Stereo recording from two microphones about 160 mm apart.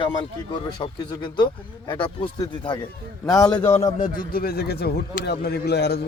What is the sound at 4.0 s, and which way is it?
Speech, 65° left (ahead or behind).